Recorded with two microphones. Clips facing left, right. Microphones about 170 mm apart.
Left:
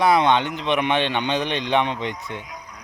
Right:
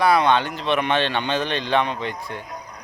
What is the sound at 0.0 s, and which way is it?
Speech, 20° left (ahead or behind).